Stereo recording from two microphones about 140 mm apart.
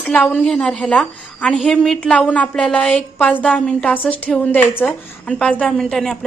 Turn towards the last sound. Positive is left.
turn(degrees=5)  # may be behind; listen again after turning